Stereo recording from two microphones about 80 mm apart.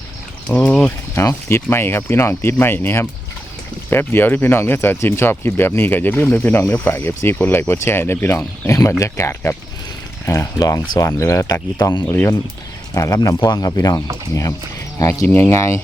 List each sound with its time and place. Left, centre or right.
0.5 s speech: centre
1.2 s speech: left
12.0 s speech: left
12.9 s speech: left
15.3 s speech: left